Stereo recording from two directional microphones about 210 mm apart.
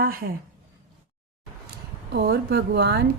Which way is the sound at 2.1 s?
45° right (ahead or behind).